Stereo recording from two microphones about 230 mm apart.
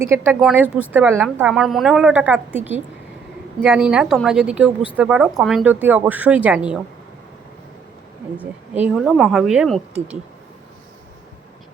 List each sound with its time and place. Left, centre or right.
0.0 s speech: centre
8.7 s speech: centre